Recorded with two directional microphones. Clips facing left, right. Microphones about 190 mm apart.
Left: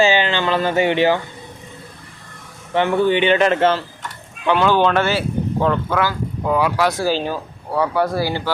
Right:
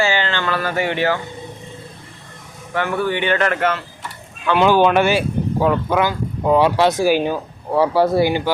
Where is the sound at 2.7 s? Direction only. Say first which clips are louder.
Left 4 dB; 20° left (ahead or behind).